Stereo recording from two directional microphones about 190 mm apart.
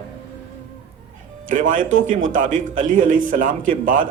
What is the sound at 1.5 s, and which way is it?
A man's voice, 45° right (ahead or behind).